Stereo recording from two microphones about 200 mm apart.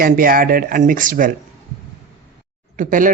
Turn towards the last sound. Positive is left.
turn(degrees=-40)  # may be behind; listen again after turning